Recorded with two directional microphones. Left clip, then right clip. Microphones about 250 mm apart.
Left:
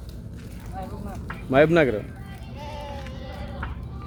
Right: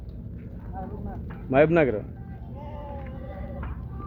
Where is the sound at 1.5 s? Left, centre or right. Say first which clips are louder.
Left 2 dB; left.